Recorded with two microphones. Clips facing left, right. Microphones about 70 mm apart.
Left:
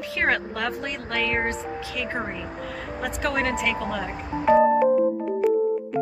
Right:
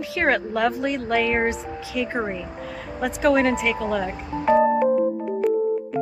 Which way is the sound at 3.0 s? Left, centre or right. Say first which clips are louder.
Right 7 dB; centre.